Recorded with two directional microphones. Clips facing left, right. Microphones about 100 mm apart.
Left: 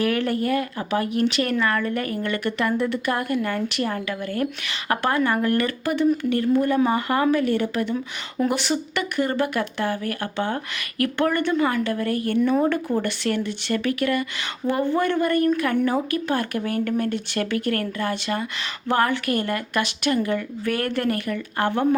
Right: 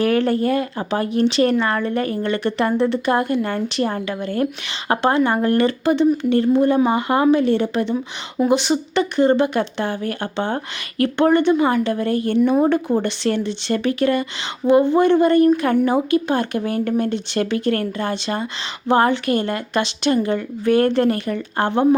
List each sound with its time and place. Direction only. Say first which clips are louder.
0.0 s a woman's voice: right 5 dB; 30° right (ahead or behind)